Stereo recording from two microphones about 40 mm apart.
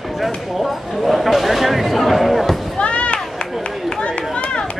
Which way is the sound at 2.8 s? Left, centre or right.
Left.